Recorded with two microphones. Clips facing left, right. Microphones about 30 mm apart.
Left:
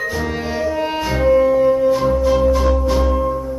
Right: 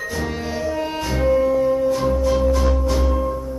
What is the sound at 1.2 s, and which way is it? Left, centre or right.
Music, centre.